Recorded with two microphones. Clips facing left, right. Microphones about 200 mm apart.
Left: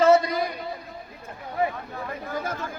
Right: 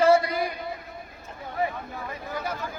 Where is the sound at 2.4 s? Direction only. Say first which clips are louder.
Left 1 dB; 45° left (ahead or behind).